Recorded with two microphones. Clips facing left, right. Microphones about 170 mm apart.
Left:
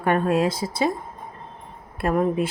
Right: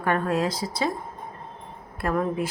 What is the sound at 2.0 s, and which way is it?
Speech, 20° left (ahead or behind).